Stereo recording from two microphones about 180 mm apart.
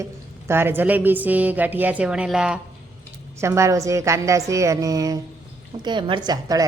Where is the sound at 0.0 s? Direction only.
15° right (ahead or behind).